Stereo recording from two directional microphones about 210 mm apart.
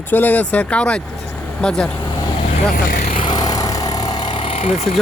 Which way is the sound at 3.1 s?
25° left (ahead or behind).